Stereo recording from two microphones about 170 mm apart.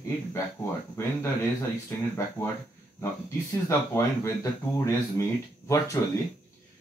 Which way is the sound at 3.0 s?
15° left (ahead or behind).